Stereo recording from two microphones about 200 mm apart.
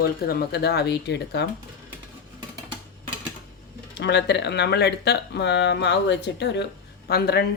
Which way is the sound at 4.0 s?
60° left (ahead or behind).